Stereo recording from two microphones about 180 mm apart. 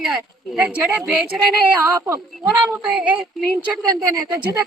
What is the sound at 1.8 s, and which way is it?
A man's voice, 15° right (ahead or behind).